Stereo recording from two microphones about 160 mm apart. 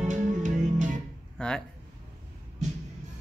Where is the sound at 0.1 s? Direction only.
50° right (ahead or behind).